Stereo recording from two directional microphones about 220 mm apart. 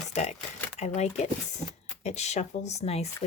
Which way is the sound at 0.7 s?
30° left (ahead or behind).